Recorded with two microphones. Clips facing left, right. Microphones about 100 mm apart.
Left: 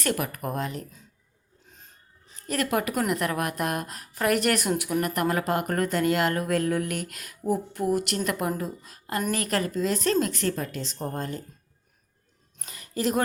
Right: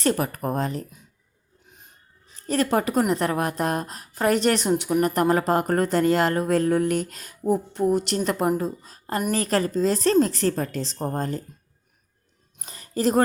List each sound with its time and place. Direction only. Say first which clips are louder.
0.0 s speech: right 5 dB; 30° right (ahead or behind)
2.5 s a woman's voice: right 4 dB; 30° right (ahead or behind)
12.6 s a sound: right 4 dB; 35° right (ahead or behind)